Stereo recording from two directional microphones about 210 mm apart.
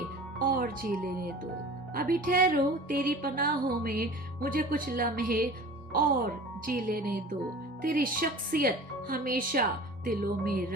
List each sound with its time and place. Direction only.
0.4 s music: 40° right (ahead or behind)
1.9 s speech: 45° right (ahead or behind)